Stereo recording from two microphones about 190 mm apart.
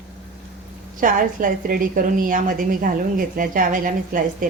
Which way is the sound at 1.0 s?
45° right (ahead or behind).